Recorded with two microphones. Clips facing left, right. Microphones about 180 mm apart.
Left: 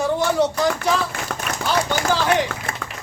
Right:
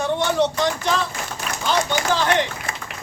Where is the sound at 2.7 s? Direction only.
50° left (ahead or behind).